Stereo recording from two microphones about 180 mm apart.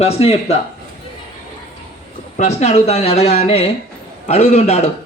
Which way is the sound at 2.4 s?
40° left (ahead or behind).